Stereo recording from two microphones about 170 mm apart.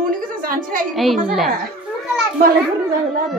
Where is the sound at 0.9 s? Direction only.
Centre (ahead or behind).